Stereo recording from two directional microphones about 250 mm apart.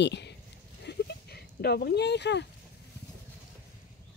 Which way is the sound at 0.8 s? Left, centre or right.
Left.